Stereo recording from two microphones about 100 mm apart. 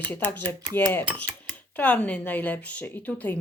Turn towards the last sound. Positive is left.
turn(degrees=15)  # may be behind; listen again after turning